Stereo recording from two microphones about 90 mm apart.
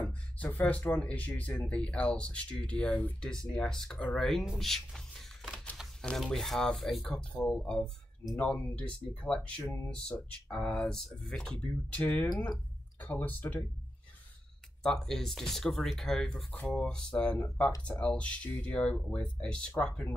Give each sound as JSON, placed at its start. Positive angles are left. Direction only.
{"t": 0.0, "sound": "speech", "side_deg": 15}
{"t": 12.0, "sound": "speech", "side_deg": 25}
{"t": 14.8, "sound": "speech", "side_deg": 5}